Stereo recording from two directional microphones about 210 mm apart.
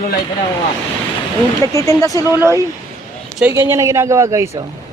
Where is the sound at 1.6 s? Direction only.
15° left (ahead or behind).